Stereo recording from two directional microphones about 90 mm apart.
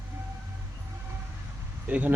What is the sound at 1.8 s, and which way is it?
Speech, 20° right (ahead or behind).